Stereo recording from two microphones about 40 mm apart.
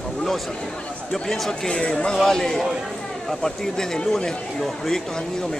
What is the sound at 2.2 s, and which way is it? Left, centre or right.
Speech, centre.